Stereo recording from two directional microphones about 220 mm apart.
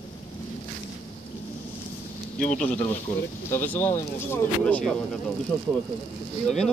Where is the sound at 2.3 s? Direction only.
35° left (ahead or behind).